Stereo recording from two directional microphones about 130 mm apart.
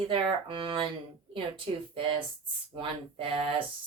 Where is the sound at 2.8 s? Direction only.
45° right (ahead or behind).